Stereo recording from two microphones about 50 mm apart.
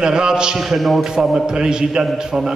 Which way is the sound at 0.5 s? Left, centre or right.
Centre.